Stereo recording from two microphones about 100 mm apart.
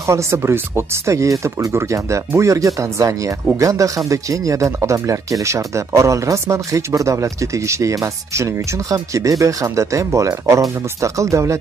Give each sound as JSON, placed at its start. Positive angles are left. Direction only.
{"t": 0.0, "sound": "speech", "side_deg": -30}